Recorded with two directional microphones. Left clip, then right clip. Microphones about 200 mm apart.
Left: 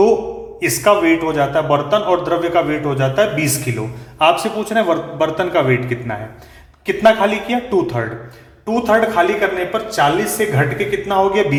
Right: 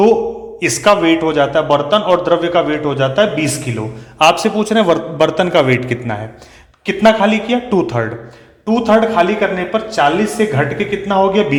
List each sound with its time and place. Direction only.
0.6 s a man's voice: 35° right (ahead or behind)